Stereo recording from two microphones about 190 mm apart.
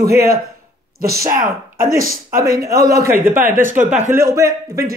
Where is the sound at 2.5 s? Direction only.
15° right (ahead or behind).